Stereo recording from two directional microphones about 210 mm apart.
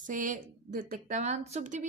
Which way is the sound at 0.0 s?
40° right (ahead or behind).